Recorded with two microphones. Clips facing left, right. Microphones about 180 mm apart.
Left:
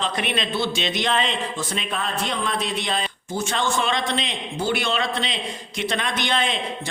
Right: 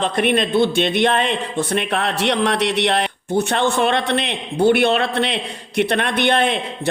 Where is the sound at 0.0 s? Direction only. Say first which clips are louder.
Right 8 dB; 55° right (ahead or behind).